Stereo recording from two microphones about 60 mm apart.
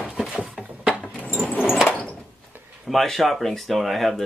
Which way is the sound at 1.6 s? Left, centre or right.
Centre.